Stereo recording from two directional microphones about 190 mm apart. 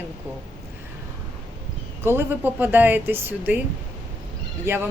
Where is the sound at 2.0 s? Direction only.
15° right (ahead or behind).